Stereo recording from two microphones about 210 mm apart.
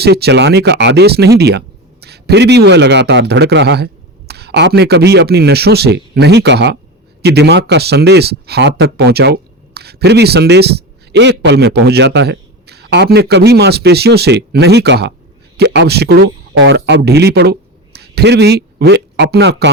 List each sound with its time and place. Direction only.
0.0 s speech: 50° right (ahead or behind)